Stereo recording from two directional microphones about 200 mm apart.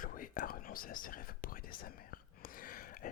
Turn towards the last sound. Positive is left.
turn(degrees=45)  # may be behind; listen again after turning